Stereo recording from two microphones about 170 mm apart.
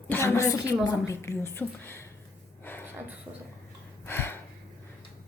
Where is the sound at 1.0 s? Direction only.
15° left (ahead or behind).